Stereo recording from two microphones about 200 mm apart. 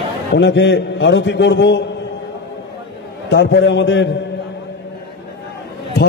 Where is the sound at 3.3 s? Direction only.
60° left (ahead or behind).